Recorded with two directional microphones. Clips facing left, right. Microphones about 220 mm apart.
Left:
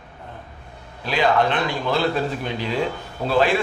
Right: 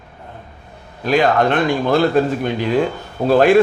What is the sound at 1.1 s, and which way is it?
A man's voice, 50° right (ahead or behind).